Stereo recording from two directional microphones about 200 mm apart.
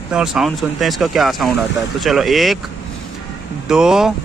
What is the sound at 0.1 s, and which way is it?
Speech, 5° right (ahead or behind).